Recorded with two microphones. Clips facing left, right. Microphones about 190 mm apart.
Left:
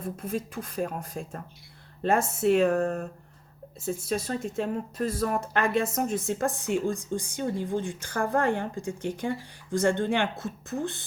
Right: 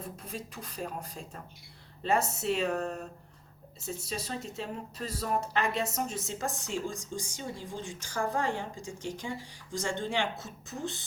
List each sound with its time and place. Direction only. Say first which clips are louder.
0.0 s speech: left 9 dB; 50° left (ahead or behind)